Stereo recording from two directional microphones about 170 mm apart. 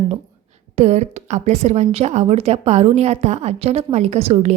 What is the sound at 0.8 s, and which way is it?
A woman's voice, 40° right (ahead or behind).